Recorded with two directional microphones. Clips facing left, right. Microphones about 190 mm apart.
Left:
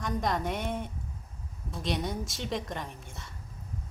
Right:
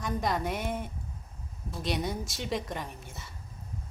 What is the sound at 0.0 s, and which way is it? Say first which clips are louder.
Speech: even; 5° right (ahead or behind).